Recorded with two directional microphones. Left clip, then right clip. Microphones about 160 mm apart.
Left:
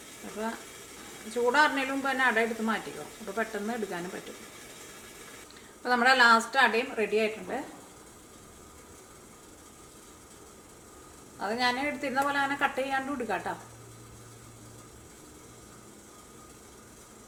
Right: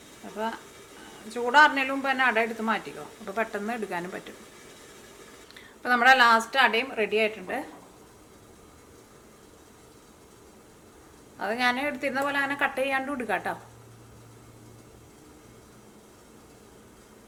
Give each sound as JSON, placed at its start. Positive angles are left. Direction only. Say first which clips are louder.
{"t": 1.3, "sound": "a woman's voice", "louder": "right 5 dB", "side_deg": -20}
{"t": 5.8, "sound": "a woman's voice", "louder": "right 3 dB", "side_deg": -20}
{"t": 11.3, "sound": "a woman's voice", "louder": "right 3 dB", "side_deg": -20}